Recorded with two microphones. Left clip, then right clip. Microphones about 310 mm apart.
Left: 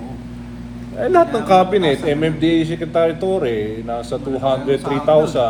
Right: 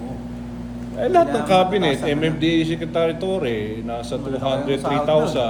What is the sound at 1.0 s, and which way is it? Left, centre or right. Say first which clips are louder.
A man's voice: left 3 dB; left.